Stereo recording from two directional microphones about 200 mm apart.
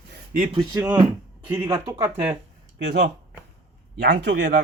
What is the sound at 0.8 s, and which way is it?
Speech, 10° right (ahead or behind).